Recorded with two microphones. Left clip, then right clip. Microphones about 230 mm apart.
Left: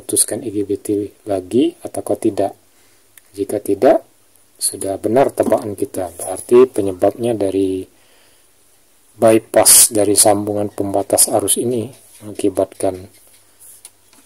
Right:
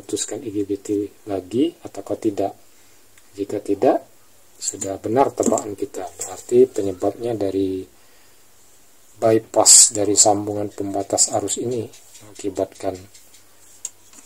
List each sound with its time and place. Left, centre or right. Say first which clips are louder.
0.0 s speech: left 5 dB; left
9.2 s speech: left 5 dB; left